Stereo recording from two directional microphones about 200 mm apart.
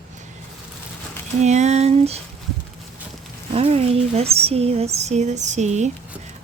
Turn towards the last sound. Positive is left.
turn(degrees=-35)  # may be behind; listen again after turning